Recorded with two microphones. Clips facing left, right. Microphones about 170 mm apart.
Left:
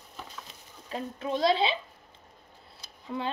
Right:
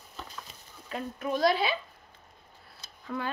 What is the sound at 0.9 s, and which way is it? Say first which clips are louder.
Speech: even; 25° left (ahead or behind).